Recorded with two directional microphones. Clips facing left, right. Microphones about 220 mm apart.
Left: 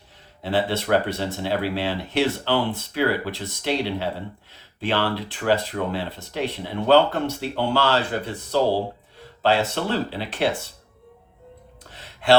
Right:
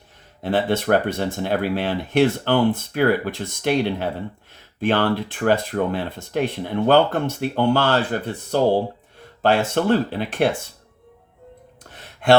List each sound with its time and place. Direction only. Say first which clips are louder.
0.4 s speech: right 3 dB; 50° right (ahead or behind)